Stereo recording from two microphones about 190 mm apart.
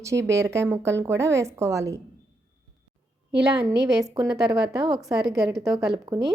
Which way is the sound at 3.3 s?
60° right (ahead or behind).